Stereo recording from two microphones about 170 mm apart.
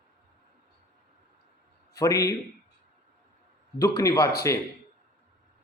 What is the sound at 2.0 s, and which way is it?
Speech, 20° left (ahead or behind).